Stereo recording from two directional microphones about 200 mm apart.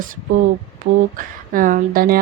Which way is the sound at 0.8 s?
45° right (ahead or behind).